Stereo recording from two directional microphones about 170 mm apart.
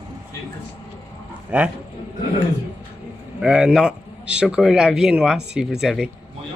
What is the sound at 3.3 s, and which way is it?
A man's voice, 5° right (ahead or behind).